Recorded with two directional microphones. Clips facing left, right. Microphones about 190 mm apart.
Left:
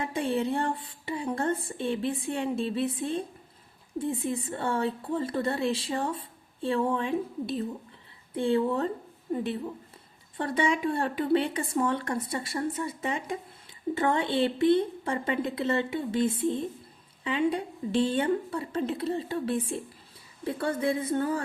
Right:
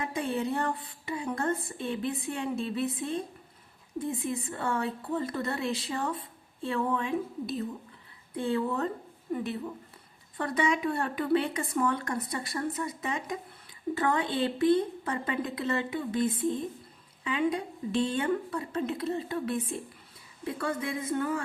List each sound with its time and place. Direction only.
0.0 s speech: 30° left (ahead or behind)